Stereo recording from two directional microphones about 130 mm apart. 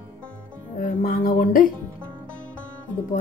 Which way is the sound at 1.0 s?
90° left.